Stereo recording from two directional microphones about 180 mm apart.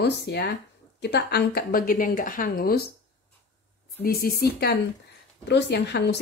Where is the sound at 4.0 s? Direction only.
60° left (ahead or behind).